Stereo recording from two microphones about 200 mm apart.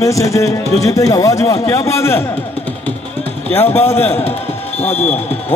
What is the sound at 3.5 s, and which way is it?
Speech, 10° left (ahead or behind).